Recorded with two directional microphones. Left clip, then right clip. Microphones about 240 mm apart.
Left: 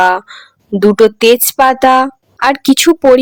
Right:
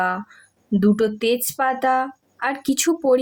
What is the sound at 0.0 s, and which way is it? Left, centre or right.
A woman's voice, left.